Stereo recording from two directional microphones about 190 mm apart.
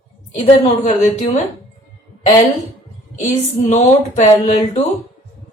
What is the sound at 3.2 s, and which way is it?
A woman's voice, 40° left (ahead or behind).